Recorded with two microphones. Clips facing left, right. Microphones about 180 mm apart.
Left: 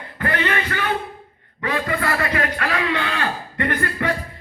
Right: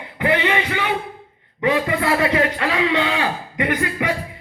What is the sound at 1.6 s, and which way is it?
A man's voice, 20° right (ahead or behind).